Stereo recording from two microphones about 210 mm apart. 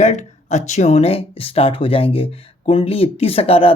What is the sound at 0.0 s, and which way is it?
Speech, 35° left (ahead or behind).